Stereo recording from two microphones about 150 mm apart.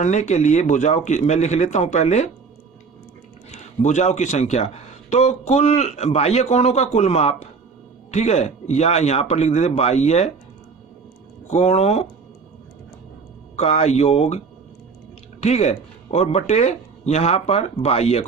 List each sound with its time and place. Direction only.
0.0 s speech: 50° left (ahead or behind)
3.5 s speech: 50° left (ahead or behind)
11.5 s speech: 45° left (ahead or behind)
13.6 s speech: 45° left (ahead or behind)